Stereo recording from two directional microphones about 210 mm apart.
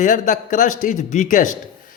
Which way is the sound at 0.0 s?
40° left (ahead or behind).